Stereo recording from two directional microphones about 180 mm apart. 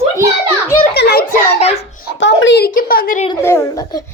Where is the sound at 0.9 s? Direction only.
65° left (ahead or behind).